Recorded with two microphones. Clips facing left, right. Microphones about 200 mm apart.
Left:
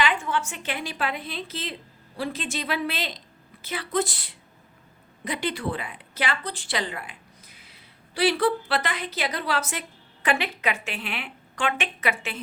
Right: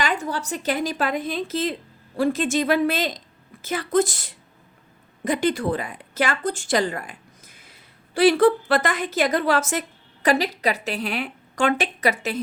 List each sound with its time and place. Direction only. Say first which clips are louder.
0.0 s a woman's voice: even; 40° right (ahead or behind)